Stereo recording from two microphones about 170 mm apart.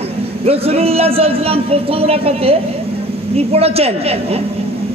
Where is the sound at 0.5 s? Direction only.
35° right (ahead or behind).